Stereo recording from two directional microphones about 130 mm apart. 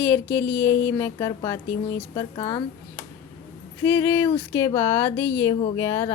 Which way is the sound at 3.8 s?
20° left (ahead or behind).